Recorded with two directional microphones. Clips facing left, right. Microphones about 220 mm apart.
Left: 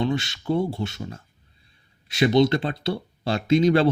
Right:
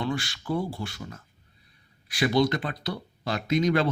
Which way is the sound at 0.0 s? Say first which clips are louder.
Left 5 dB; 20° left (ahead or behind).